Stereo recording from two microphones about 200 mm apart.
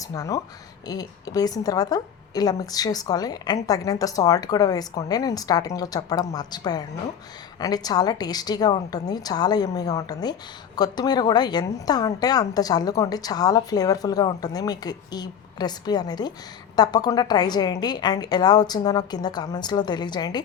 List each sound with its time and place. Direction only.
0.1 s a woman's voice: 15° left (ahead or behind)